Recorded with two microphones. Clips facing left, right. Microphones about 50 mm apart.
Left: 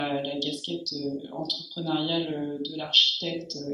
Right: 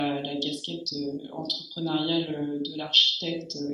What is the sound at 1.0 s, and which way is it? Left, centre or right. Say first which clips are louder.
Speech: even; centre.